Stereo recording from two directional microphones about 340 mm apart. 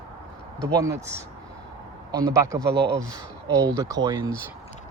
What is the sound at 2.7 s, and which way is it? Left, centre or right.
Speech, right.